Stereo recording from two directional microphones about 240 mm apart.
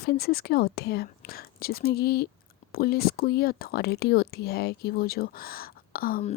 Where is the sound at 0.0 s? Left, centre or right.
Left.